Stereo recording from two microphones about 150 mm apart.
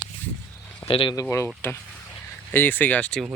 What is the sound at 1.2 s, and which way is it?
Speech, 20° left (ahead or behind).